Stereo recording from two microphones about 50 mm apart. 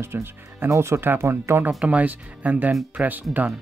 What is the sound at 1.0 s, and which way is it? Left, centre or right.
Speech, right.